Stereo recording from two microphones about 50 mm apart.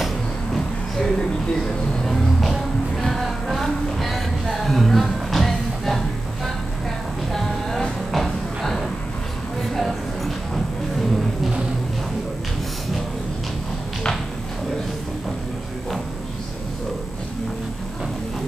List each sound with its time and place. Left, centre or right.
0.0 s music: centre